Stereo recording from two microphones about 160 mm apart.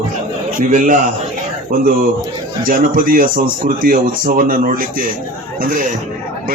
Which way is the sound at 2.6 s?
60° right (ahead or behind).